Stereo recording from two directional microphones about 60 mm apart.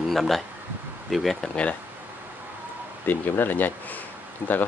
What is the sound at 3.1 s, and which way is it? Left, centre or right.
Speech, left.